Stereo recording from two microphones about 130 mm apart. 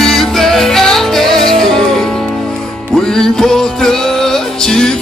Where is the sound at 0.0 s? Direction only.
5° left (ahead or behind).